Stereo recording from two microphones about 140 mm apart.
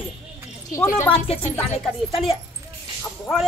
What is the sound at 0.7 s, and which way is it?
Speech, 20° left (ahead or behind).